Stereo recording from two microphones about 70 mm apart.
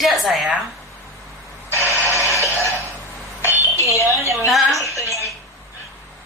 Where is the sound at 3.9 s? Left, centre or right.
Left.